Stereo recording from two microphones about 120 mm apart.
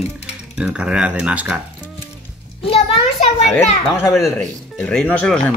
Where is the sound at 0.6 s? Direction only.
10° right (ahead or behind).